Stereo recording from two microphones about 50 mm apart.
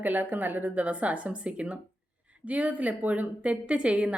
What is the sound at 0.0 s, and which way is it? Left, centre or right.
A woman's voice, right.